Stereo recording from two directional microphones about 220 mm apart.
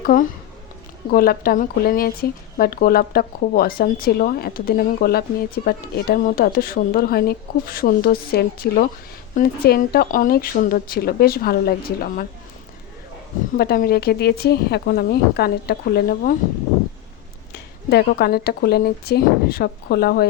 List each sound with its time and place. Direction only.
0.0 s speech: 40° left (ahead or behind)
13.6 s speech: 45° left (ahead or behind)
17.5 s speech: 45° left (ahead or behind)